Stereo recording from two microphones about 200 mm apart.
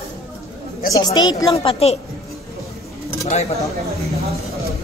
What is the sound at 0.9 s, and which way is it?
A woman's voice, 20° left (ahead or behind).